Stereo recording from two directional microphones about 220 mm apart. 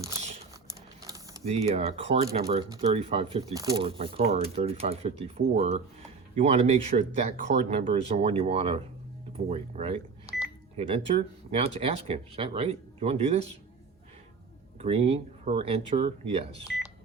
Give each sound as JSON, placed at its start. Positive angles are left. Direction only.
{"t": 1.0, "sound": "a sound", "side_deg": -15}
{"t": 1.5, "sound": "speech", "side_deg": -30}
{"t": 3.5, "sound": "speech", "side_deg": -15}
{"t": 14.8, "sound": "speech", "side_deg": -25}
{"t": 16.7, "sound": "beep", "side_deg": 0}